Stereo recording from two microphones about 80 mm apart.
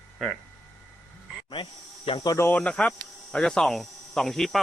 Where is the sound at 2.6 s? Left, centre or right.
Centre.